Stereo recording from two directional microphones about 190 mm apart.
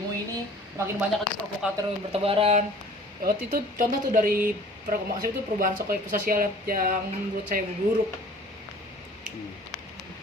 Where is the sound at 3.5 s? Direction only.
45° right (ahead or behind).